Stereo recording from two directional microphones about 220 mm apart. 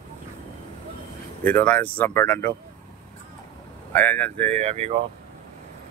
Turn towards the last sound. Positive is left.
turn(degrees=-30)  # may be behind; listen again after turning